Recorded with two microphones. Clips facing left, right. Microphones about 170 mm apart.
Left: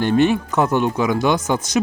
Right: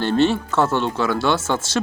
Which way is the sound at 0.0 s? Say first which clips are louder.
Left 2 dB; 15° left (ahead or behind).